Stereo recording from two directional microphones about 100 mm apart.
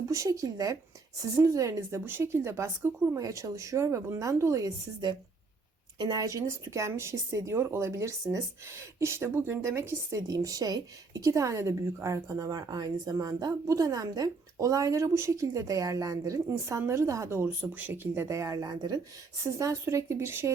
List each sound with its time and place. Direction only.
0.1 s speech: 35° right (ahead or behind)